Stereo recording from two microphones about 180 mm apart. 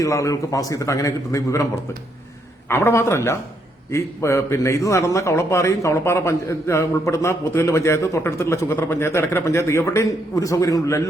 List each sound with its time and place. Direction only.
0.0 s a man's voice: 15° left (ahead or behind)